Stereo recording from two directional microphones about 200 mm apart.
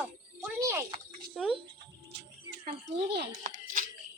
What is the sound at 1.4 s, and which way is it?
Speech, centre (ahead or behind).